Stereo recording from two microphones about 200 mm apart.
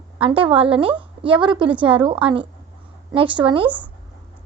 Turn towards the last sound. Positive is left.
turn(degrees=-25)  # may be behind; listen again after turning